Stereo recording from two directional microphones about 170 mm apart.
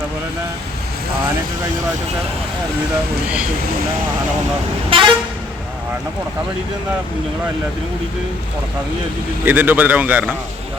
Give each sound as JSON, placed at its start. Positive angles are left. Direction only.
{"t": 4.9, "sound": "vehicle", "side_deg": -30}
{"t": 9.4, "sound": "speech", "side_deg": -10}